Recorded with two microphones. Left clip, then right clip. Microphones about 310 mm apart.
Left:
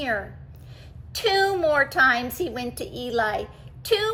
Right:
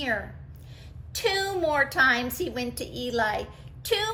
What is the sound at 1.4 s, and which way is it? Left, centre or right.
A woman's voice, centre.